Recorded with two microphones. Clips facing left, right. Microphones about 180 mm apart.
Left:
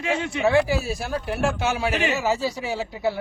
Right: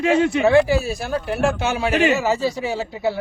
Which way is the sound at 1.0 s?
5° left (ahead or behind).